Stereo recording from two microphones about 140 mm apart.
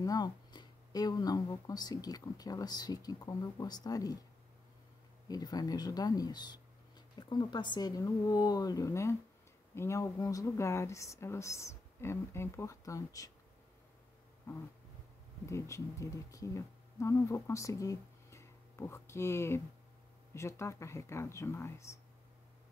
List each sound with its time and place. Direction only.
0.0 s speech: 25° left (ahead or behind)
5.3 s speech: 25° left (ahead or behind)
15.4 s speech: 20° left (ahead or behind)